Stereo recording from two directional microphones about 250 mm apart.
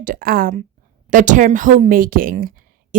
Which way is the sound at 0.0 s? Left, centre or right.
Right.